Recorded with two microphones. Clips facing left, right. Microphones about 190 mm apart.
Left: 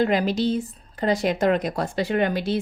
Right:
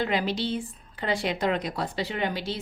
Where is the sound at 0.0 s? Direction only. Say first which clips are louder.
Left 6 dB; 45° left (ahead or behind).